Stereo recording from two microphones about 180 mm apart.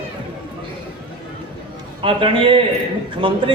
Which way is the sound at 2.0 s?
30° right (ahead or behind).